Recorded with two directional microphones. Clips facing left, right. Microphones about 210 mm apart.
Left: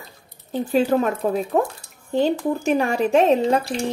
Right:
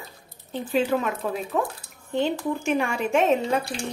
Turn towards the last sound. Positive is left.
turn(degrees=35)  # may be behind; listen again after turning